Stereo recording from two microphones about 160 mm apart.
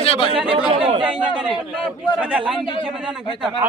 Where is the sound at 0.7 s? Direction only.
35° right (ahead or behind).